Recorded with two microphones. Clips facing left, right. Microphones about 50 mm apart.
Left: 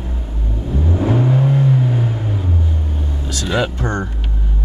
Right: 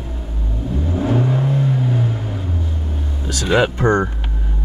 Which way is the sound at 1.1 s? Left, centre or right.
Centre.